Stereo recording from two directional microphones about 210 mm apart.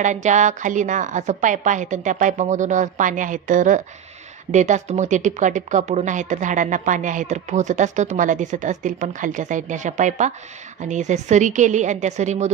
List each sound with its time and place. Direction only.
0.0 s speech: 35° right (ahead or behind)